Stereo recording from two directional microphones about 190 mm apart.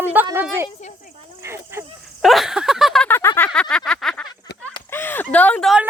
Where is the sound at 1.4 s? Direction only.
15° right (ahead or behind).